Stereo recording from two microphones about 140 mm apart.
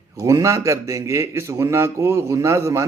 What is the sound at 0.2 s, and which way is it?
A man's voice, 20° right (ahead or behind).